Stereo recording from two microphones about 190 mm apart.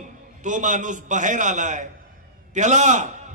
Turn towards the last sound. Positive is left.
turn(degrees=-40)  # may be behind; listen again after turning